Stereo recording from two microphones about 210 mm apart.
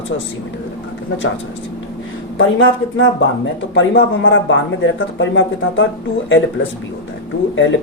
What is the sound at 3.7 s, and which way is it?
Speech, 65° left (ahead or behind).